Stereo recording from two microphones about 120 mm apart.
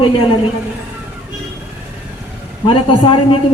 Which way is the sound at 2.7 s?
45° left (ahead or behind).